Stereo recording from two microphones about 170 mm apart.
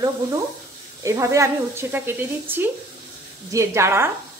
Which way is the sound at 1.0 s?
20° right (ahead or behind).